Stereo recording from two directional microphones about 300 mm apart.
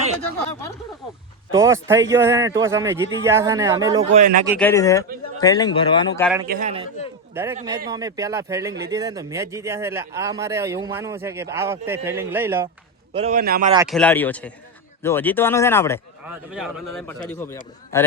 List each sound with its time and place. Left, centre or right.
1.5 s a man's voice: centre
4.2 s a man's voice: right
4.5 s speech: centre
6.5 s a man's voice: right
7.3 s a man's voice: centre
13.1 s a man's voice: right
13.7 s a man's voice: centre
16.2 s a man's voice: centre